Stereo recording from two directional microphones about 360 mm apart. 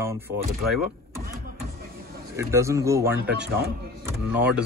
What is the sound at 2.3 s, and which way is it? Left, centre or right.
Speech, centre.